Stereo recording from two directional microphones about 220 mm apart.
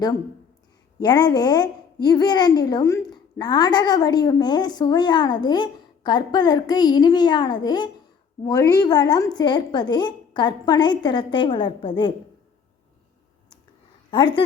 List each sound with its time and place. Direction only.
1.0 s a woman's voice: 20° left (ahead or behind)
14.1 s a woman's voice: 20° left (ahead or behind)